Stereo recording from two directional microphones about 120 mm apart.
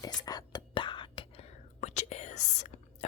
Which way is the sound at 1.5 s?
75° left (ahead or behind).